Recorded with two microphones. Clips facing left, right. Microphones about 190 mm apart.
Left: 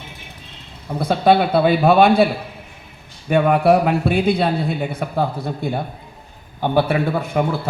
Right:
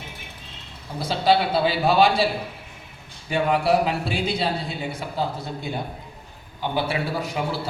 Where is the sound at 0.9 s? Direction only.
55° left (ahead or behind).